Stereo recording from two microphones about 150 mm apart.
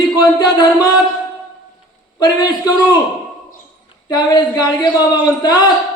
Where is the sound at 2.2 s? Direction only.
25° left (ahead or behind).